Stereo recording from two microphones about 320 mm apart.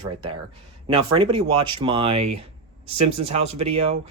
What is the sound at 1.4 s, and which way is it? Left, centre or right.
Speech, right.